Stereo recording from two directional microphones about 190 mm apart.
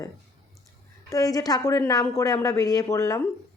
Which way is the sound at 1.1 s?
20° left (ahead or behind).